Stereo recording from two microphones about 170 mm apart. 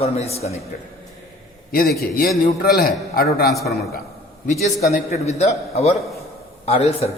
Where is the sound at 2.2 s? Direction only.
60° left (ahead or behind).